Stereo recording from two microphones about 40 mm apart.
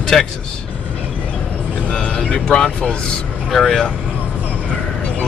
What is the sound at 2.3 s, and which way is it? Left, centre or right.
Speech, left.